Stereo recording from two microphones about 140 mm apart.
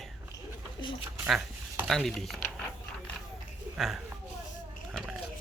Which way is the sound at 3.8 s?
Centre (ahead or behind).